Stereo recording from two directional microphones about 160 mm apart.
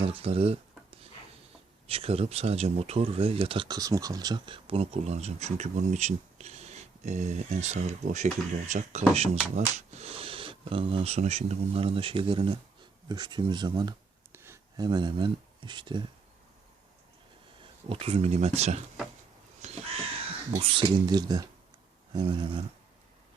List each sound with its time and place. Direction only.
0.0 s speech: 35° right (ahead or behind)
1.9 s speech: 35° right (ahead or behind)
14.3 s a sound: 15° right (ahead or behind)
14.8 s speech: 30° right (ahead or behind)
17.8 s speech: 35° right (ahead or behind)
19.6 s crow: 45° right (ahead or behind)
20.5 s speech: 35° right (ahead or behind)